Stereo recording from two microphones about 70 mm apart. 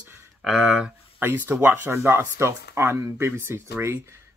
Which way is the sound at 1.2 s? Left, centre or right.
Right.